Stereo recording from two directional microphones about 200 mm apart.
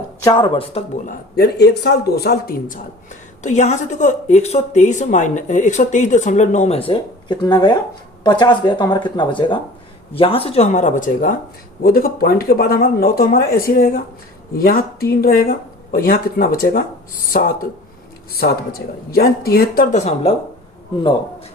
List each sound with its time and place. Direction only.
0.2 s a woman's voice: 20° left (ahead or behind)